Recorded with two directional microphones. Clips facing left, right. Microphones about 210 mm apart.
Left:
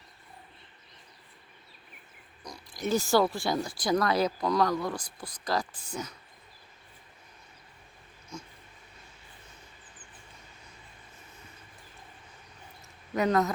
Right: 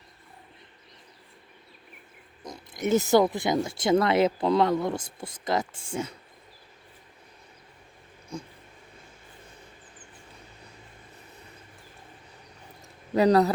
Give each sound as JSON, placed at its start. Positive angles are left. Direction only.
{"t": 2.4, "sound": "speech", "side_deg": -20}
{"t": 8.3, "sound": "dog", "side_deg": -35}
{"t": 13.1, "sound": "speech", "side_deg": -35}